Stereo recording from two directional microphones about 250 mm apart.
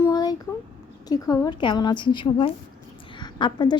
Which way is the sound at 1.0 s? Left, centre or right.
Centre.